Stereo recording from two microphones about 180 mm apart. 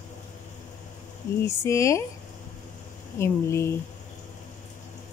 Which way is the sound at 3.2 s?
15° left (ahead or behind).